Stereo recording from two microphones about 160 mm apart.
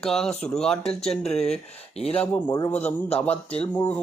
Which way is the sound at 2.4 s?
25° left (ahead or behind).